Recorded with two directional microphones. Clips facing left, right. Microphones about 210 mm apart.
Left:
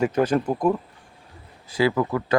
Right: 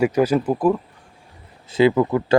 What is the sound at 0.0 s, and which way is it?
Speech, 10° right (ahead or behind).